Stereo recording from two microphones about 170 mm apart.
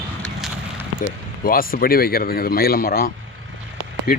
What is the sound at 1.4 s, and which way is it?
Speech, 60° left (ahead or behind).